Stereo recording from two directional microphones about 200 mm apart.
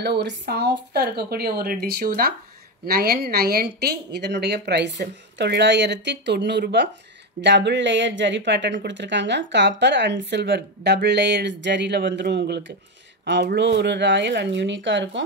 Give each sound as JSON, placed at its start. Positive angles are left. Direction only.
{"t": 0.0, "sound": "speech", "side_deg": -55}